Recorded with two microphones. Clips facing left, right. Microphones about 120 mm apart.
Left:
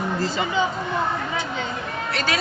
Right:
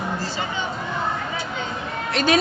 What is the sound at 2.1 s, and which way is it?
Speech, 20° right (ahead or behind).